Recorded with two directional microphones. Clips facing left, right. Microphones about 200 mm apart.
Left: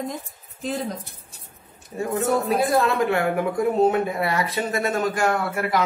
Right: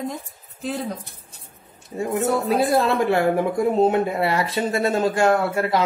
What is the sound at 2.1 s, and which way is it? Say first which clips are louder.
Speech: right 1 dB; 30° right (ahead or behind).